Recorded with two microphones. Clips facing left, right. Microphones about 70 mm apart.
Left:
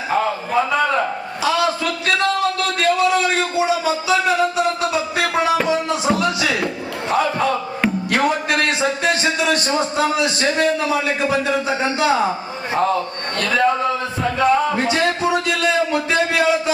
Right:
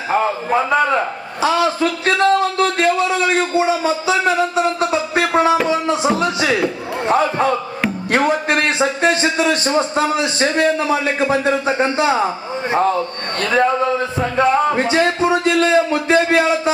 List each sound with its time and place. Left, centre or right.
1.4 s a sound: right
4.0 s music: right
7.1 s a sound: right
8.1 s a man's voice: right
13.4 s a man's voice: right
14.2 s music: right